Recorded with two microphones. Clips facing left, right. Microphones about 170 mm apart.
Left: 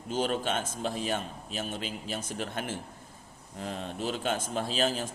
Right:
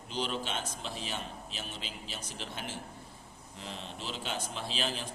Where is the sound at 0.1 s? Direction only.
50° left (ahead or behind).